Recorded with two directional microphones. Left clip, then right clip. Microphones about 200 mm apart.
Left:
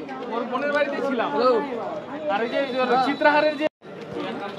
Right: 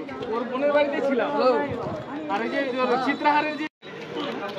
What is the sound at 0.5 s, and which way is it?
A man's voice, 20° left (ahead or behind).